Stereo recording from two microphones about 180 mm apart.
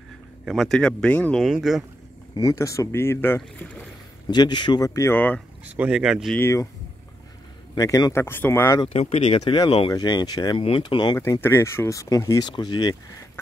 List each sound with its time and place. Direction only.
0.5 s speech: centre (ahead or behind)
2.3 s speech: 20° left (ahead or behind)
4.3 s speech: 25° left (ahead or behind)
5.8 s speech: 5° right (ahead or behind)
6.3 s speech: 15° left (ahead or behind)
7.7 s speech: 20° left (ahead or behind)
8.8 s speech: 35° left (ahead or behind)
11.4 s speech: 15° left (ahead or behind)